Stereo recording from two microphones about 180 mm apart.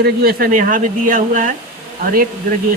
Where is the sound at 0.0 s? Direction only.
60° right (ahead or behind).